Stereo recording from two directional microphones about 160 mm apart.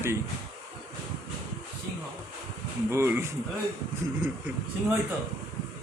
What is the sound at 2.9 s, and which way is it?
Speech, 15° right (ahead or behind).